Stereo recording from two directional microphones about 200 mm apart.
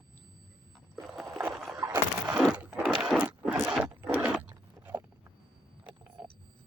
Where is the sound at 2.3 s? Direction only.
5° right (ahead or behind).